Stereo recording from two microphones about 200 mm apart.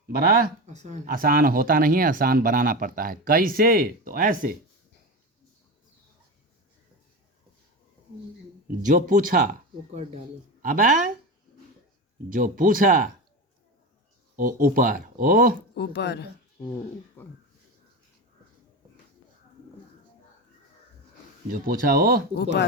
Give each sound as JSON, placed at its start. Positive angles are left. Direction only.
{"t": 0.1, "sound": "speech", "side_deg": -45}
{"t": 8.6, "sound": "speech", "side_deg": -40}
{"t": 12.3, "sound": "speech", "side_deg": -40}
{"t": 14.3, "sound": "speech", "side_deg": -45}
{"t": 15.7, "sound": "speech", "side_deg": 55}
{"t": 17.2, "sound": "speech", "side_deg": 10}
{"t": 21.5, "sound": "speech", "side_deg": -45}